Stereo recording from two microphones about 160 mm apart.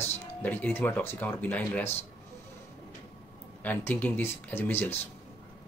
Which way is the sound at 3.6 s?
10° left (ahead or behind).